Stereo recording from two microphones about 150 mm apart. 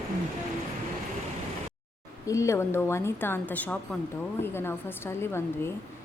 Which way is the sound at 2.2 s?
20° left (ahead or behind).